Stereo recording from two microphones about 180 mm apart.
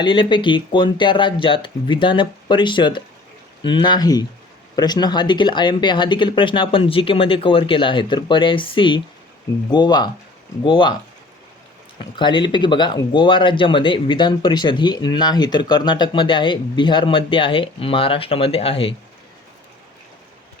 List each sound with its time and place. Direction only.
0.0 s speech: 25° left (ahead or behind)
12.1 s speech: 25° left (ahead or behind)